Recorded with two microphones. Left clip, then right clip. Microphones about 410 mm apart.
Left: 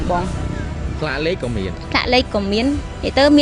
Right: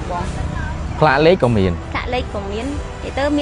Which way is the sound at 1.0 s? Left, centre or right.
Right.